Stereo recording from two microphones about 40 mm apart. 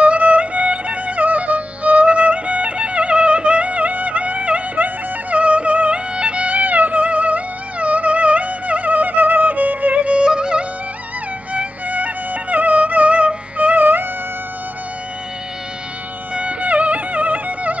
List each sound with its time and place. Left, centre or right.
0.0 s music: right
10.0 s music: right
11.5 s music: right
16.3 s music: right